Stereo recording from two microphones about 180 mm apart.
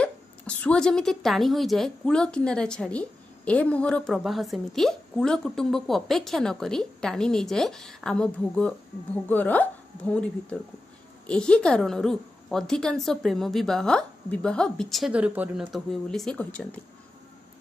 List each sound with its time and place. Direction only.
0.0 s a woman's voice: 5° left (ahead or behind)
11.2 s a woman's voice: 5° left (ahead or behind)